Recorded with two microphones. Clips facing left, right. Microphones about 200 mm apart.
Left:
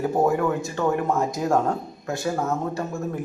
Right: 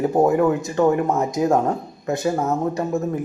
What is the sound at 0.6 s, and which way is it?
Speech, 20° right (ahead or behind).